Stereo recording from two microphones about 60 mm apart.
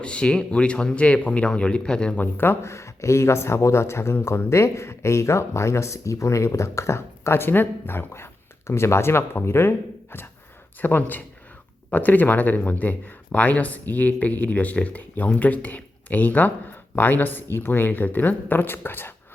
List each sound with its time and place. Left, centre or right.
0.0 s speech: centre
2.1 s speech: left
2.6 s speech: left